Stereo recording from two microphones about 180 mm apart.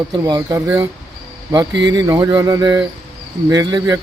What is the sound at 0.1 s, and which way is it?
Speech, 20° right (ahead or behind).